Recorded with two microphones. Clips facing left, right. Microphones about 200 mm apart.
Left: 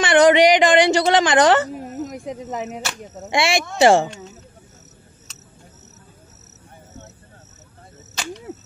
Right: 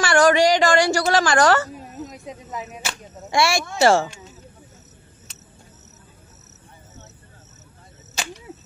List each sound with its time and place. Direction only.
0.0 s a woman's voice: 20° left (ahead or behind)
1.8 s a sound: 70° left (ahead or behind)
2.2 s speech: 70° left (ahead or behind)
3.3 s speech: 20° left (ahead or behind)